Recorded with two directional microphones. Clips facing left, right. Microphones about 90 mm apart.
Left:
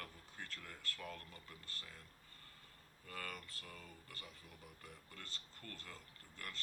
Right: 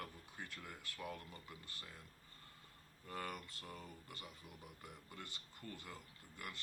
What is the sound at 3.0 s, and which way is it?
Speech, 20° right (ahead or behind).